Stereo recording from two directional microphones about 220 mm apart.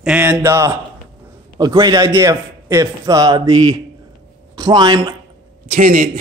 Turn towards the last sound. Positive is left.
turn(degrees=-35)  # may be behind; listen again after turning